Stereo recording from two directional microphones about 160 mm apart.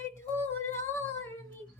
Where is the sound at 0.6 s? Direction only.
15° left (ahead or behind).